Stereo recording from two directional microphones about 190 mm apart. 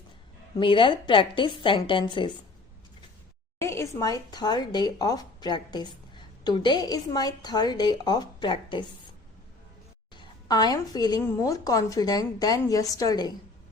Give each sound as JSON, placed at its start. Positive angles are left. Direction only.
{"t": 0.6, "sound": "speech", "side_deg": 25}
{"t": 3.6, "sound": "speech", "side_deg": 15}
{"t": 10.2, "sound": "speech", "side_deg": 20}